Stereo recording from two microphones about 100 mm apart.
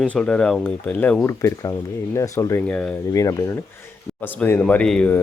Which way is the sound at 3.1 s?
35° left (ahead or behind).